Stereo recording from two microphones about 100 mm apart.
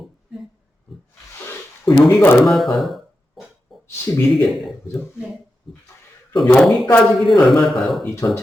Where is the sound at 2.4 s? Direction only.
Centre (ahead or behind).